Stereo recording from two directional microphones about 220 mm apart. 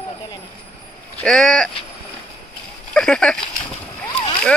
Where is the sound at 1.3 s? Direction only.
5° left (ahead or behind).